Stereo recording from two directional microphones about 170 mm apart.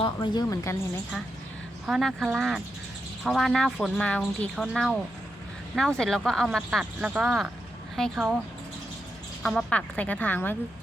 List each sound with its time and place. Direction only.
0.0 s speech: 25° left (ahead or behind)
1.9 s speech: centre (ahead or behind)
9.4 s speech: 5° left (ahead or behind)